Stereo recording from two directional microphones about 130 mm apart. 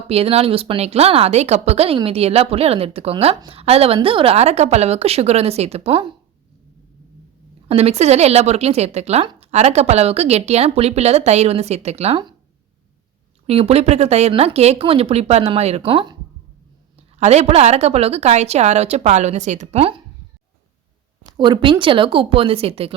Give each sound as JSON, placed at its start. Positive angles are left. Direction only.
{"t": 0.1, "sound": "speech", "side_deg": -50}
{"t": 7.7, "sound": "speech", "side_deg": -55}
{"t": 13.5, "sound": "speech", "side_deg": -50}
{"t": 17.2, "sound": "speech", "side_deg": -60}
{"t": 21.3, "sound": "speech", "side_deg": -35}